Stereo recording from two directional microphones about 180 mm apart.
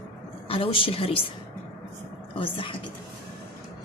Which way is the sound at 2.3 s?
30° left (ahead or behind).